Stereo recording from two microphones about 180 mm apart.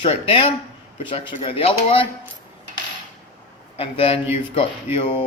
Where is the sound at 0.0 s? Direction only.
30° left (ahead or behind).